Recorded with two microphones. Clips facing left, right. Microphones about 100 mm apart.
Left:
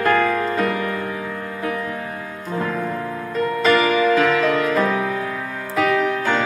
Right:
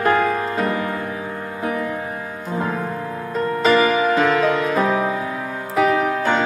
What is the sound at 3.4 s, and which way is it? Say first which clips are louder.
Music: right 1 dB; 20° right (ahead or behind).